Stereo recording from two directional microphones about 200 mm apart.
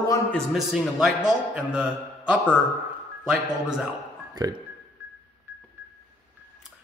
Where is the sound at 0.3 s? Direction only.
Centre (ahead or behind).